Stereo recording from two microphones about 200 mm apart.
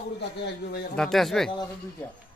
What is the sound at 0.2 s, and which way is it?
Speech, 55° left (ahead or behind).